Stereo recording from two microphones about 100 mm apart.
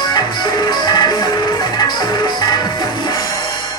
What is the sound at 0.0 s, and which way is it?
Music, 45° left (ahead or behind).